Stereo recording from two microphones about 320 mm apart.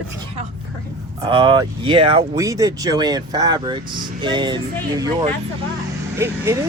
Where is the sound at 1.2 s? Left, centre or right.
Centre.